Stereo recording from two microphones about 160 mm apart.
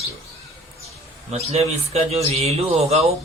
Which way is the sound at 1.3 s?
40° right (ahead or behind).